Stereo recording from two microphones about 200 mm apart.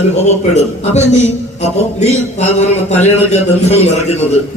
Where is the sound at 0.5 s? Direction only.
35° left (ahead or behind).